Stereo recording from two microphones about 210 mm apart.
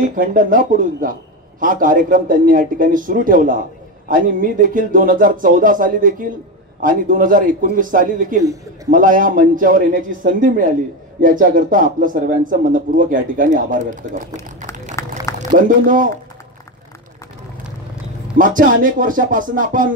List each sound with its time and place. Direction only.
0.1 s speech: 40° right (ahead or behind)
15.0 s a sound: 15° left (ahead or behind)
18.4 s speech: 40° right (ahead or behind)